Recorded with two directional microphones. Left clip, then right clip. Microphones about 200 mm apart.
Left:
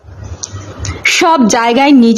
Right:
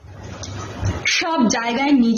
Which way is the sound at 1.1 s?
50° left (ahead or behind).